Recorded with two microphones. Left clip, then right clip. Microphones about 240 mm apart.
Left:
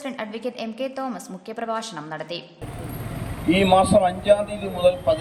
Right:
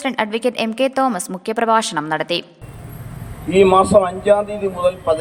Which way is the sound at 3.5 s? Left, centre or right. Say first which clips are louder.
Right 5 dB; centre.